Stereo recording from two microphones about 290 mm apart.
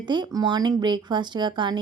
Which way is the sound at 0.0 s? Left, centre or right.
Centre.